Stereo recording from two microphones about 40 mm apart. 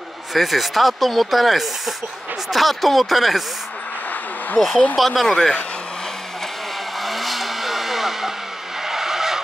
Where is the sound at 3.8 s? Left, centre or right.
Left.